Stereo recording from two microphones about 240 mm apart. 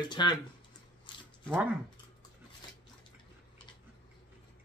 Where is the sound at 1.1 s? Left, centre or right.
Centre.